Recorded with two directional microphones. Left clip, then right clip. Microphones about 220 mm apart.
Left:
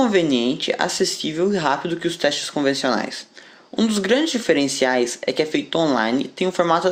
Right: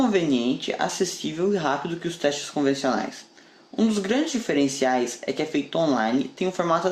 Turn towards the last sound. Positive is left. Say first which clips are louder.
# left 5 dB
turn(degrees=35)  # may be behind; listen again after turning